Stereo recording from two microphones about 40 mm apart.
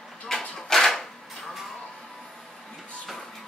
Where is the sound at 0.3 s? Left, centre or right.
Centre.